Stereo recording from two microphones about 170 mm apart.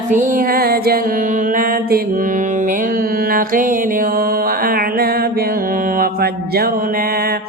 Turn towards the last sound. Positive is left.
turn(degrees=-65)  # may be behind; listen again after turning